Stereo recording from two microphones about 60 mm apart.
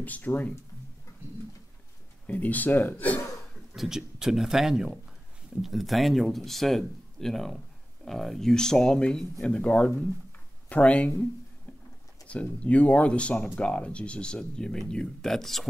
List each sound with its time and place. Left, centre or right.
0.0 s speech: left
2.2 s speech: left
3.7 s speech: centre
9.6 s speech: left
12.3 s speech: left; by 15.7 s centre